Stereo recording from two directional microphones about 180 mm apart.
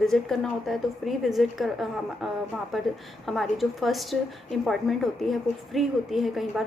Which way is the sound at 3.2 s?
Centre (ahead or behind).